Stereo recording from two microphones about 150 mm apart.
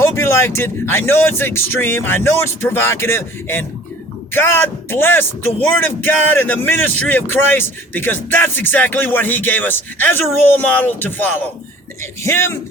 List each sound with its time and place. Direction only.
0.0 s speech: 15° left (ahead or behind)